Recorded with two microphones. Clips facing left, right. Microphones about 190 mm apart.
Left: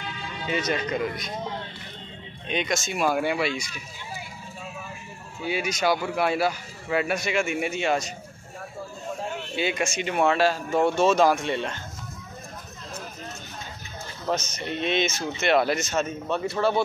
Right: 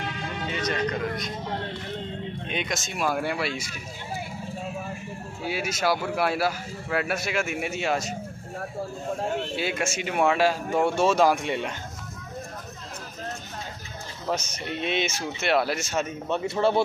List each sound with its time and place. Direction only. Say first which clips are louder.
0.5 s speech: left 2 dB; 10° left (ahead or behind)
2.4 s speech: left 6 dB; 5° right (ahead or behind)
5.4 s speech: left 2 dB; 5° right (ahead or behind)
9.6 s speech: left 2 dB; 5° right (ahead or behind)
14.3 s speech: left 2 dB; 10° right (ahead or behind)
16.3 s a man's voice: right 3 dB; 20° right (ahead or behind)